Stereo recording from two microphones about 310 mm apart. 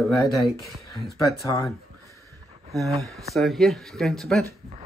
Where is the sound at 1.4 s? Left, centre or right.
Centre.